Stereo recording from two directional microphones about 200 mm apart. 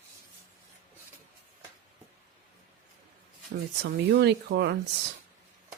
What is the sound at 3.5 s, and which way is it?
Speech, 55° right (ahead or behind).